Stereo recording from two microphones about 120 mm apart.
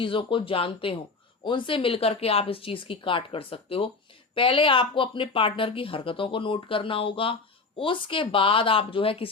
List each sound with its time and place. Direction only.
0.0 s speech: 45° left (ahead or behind)